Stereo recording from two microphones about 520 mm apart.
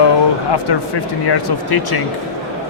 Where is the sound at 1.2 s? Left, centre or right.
Left.